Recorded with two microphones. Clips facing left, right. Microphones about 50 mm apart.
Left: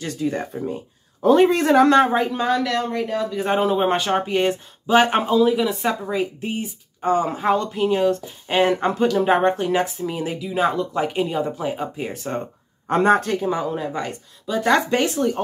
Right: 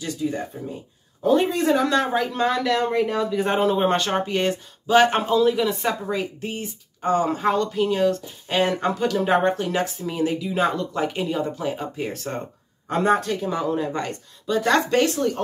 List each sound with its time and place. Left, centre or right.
0.0 s speech: left
2.3 s speech: centre
13.0 s speech: left
13.4 s speech: centre